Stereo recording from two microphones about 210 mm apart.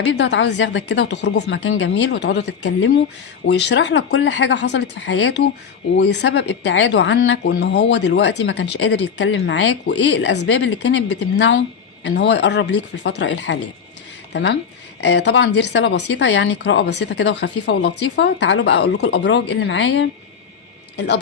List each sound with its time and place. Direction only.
0.0 s speech: 60° left (ahead or behind)